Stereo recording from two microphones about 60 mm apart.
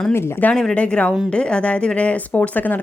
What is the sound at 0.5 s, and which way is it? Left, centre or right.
Speech, centre.